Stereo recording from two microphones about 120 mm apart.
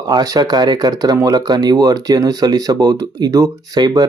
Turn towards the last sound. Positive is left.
turn(degrees=-35)  # may be behind; listen again after turning